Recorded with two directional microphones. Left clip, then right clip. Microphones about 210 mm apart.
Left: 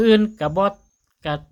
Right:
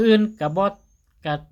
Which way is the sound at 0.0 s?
10° left (ahead or behind).